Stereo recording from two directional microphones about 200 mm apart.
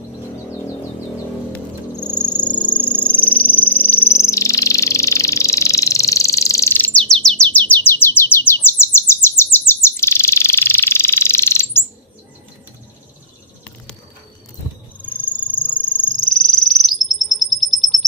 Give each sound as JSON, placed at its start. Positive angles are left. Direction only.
{"t": 2.4, "sound": "a sound", "side_deg": 20}
{"t": 2.6, "sound": "frog", "side_deg": 5}
{"t": 7.4, "sound": "bird", "side_deg": 10}
{"t": 15.2, "sound": "cricket", "side_deg": 10}
{"t": 16.3, "sound": "bird", "side_deg": 0}